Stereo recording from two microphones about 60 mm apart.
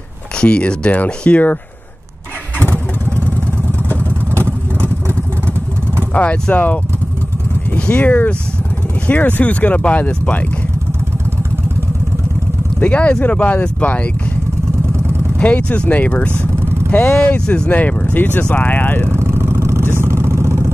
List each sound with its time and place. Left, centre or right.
0.4 s speech: centre
2.7 s vehicle: left
4.3 s vehicle: right
6.1 s speech: centre
6.5 s speech: left
12.8 s speech: left
15.3 s speech: left
19.1 s vehicle: right